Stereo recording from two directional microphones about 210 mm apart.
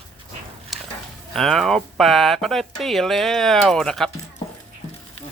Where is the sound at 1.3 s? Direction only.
Centre (ahead or behind).